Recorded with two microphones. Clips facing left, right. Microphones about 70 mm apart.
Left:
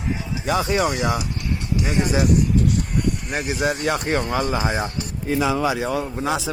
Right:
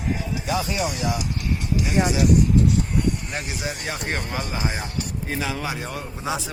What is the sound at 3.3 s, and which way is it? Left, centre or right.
Speech, left.